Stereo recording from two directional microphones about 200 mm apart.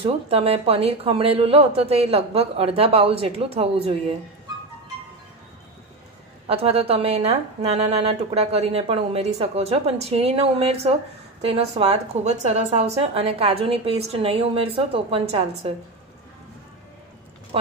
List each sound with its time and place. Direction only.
0.0 s a woman's voice: 30° right (ahead or behind)
6.4 s a woman's voice: 30° right (ahead or behind)